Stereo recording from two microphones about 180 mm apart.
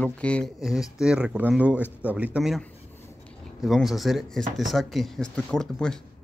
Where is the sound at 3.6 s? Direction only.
Centre (ahead or behind).